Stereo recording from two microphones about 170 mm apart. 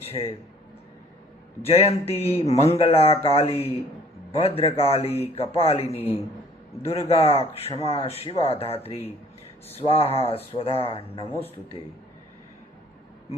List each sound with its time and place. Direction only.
0.1 s a man's voice: 35° left (ahead or behind)
1.6 s speech: 35° left (ahead or behind)